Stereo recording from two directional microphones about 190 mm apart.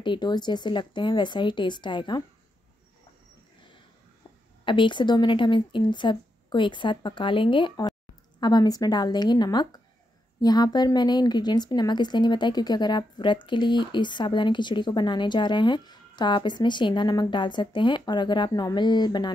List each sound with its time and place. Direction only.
0.0 s a woman's voice: 25° left (ahead or behind)
4.6 s a woman's voice: 25° left (ahead or behind)